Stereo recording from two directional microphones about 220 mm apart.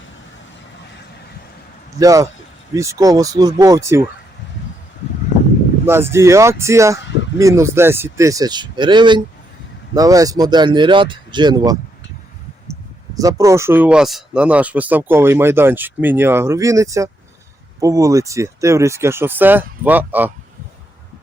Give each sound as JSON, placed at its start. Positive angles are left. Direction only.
{"t": 2.0, "sound": "speech", "side_deg": -15}
{"t": 5.8, "sound": "speech", "side_deg": -10}
{"t": 13.1, "sound": "speech", "side_deg": -15}